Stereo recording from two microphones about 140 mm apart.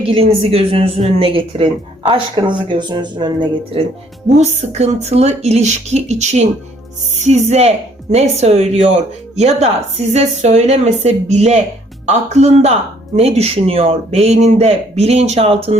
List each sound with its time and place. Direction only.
0.0 s speech: 45° right (ahead or behind)
4.4 s speech: 55° right (ahead or behind)